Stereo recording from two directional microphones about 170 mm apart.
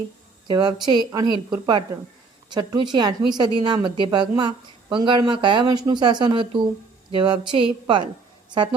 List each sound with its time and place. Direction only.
0.4 s speech: 25° right (ahead or behind)